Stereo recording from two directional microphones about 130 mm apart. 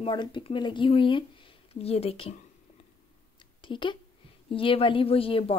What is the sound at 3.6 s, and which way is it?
A woman's voice, 40° left (ahead or behind).